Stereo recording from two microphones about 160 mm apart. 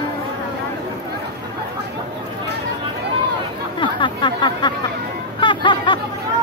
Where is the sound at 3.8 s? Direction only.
30° left (ahead or behind).